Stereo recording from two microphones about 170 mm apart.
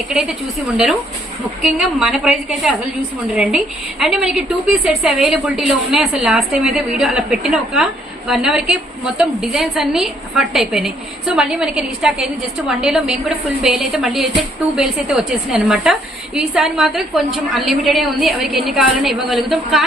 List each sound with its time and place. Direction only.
0.1 s a woman's voice: 5° right (ahead or behind)
1.6 s a woman's voice: centre (ahead or behind)